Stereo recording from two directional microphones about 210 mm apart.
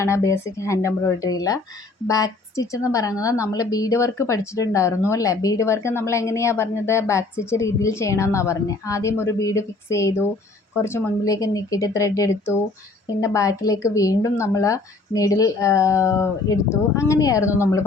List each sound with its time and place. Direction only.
0.0 s a woman's voice: 15° left (ahead or behind)